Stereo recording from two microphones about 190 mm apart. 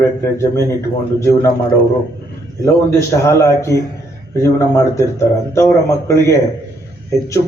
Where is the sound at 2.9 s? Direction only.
15° left (ahead or behind).